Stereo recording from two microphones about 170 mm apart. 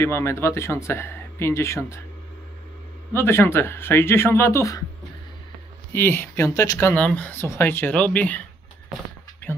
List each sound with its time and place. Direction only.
0.0 s speech: 15° left (ahead or behind)
3.1 s speech: 15° left (ahead or behind)
5.9 s speech: 15° left (ahead or behind)